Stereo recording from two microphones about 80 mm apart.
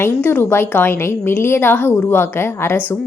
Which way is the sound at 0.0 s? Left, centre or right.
Left.